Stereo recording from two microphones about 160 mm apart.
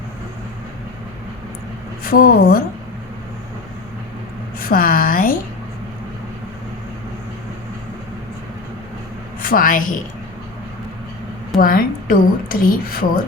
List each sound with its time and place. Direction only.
2.0 s a woman's voice: 65° left (ahead or behind)
4.7 s a woman's voice: 65° left (ahead or behind)
9.4 s a woman's voice: 65° left (ahead or behind)
11.5 s a woman's voice: 65° left (ahead or behind)